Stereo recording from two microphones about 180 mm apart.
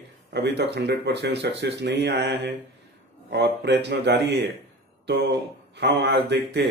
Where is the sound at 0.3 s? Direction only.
70° right (ahead or behind).